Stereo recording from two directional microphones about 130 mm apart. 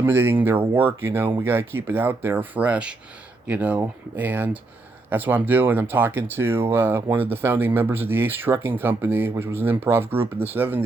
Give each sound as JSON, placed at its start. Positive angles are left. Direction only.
{"t": 0.0, "sound": "speech", "side_deg": -15}